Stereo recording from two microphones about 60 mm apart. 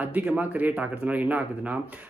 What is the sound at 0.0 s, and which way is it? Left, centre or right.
Speech, right.